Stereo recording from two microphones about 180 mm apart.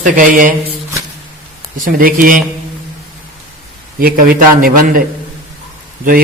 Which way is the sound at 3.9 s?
50° right (ahead or behind).